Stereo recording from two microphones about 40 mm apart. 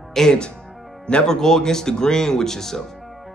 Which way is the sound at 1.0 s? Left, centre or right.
Left.